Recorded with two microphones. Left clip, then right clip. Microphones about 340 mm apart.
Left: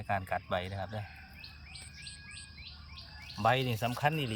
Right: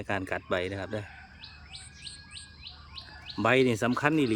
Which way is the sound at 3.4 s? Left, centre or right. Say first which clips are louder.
Right 5 dB; centre.